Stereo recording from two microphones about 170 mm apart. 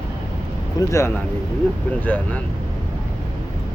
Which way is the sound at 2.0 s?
10° left (ahead or behind).